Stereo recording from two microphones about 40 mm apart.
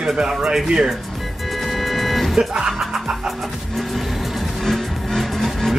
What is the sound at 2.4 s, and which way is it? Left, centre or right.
Music, centre.